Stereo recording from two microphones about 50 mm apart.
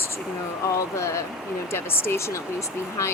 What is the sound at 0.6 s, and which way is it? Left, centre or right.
Speech, left.